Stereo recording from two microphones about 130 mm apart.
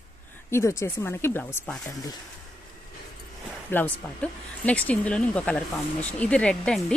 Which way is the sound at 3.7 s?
10° left (ahead or behind).